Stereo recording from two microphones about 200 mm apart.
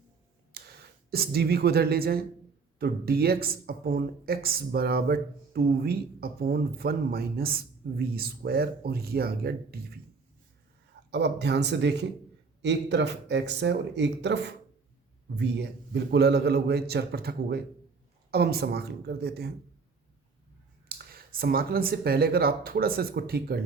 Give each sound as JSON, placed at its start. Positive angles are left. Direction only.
{"t": 0.5, "sound": "speech", "side_deg": -50}
{"t": 11.1, "sound": "a man's voice", "side_deg": -60}
{"t": 20.8, "sound": "speech", "side_deg": -50}